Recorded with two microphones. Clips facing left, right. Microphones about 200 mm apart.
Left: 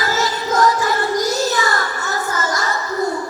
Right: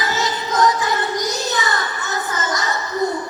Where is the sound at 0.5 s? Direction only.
20° right (ahead or behind).